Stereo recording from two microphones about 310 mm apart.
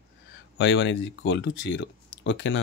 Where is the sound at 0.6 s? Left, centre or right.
Left.